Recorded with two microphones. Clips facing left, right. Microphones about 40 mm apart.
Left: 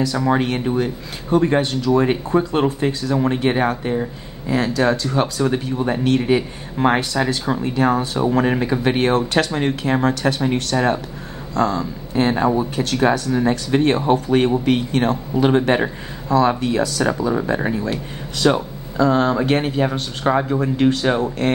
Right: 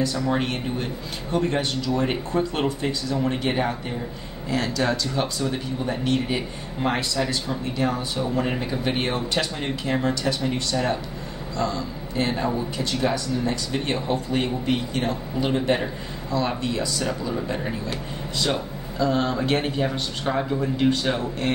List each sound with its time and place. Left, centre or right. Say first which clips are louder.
0.2 s speech: left 6 dB; left
2.3 s speech: left 6 dB; left
2.8 s speech: left 6 dB; left
3.3 s speech: left 6 dB; left
8.0 s speech: left 7 dB; left
12.4 s speech: left 7 dB; left
17.0 s speech: left 7 dB; left
18.5 s speech: left 6 dB; left
20.4 s speech: left 4 dB; left